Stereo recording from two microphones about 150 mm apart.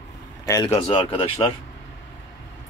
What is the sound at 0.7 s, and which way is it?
Speech, 40° left (ahead or behind).